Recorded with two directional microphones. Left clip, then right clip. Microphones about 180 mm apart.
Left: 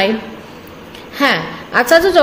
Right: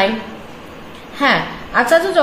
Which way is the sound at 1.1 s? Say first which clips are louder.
Even; 50° left (ahead or behind).